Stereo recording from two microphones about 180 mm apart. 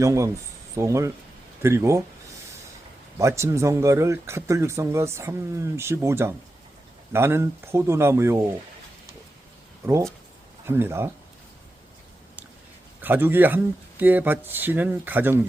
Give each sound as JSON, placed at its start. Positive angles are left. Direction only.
{"t": 0.0, "sound": "speech", "side_deg": -15}
{"t": 3.2, "sound": "speech", "side_deg": -15}
{"t": 9.8, "sound": "speech", "side_deg": -15}
{"t": 13.0, "sound": "a man's voice", "side_deg": -10}